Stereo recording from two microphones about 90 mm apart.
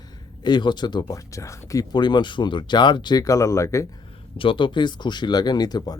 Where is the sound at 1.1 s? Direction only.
35° left (ahead or behind).